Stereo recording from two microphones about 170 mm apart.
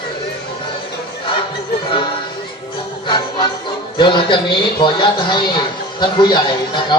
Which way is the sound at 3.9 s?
30° left (ahead or behind).